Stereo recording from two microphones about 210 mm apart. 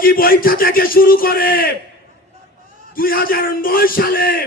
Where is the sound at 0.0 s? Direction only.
45° left (ahead or behind).